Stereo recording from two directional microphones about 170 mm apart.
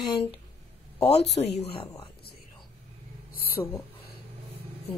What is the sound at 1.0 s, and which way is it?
Speech, 35° left (ahead or behind).